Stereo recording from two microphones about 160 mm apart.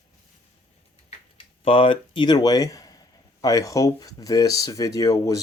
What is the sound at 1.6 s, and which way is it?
Speech, 35° left (ahead or behind).